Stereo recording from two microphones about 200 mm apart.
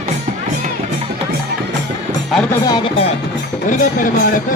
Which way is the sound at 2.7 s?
20° left (ahead or behind).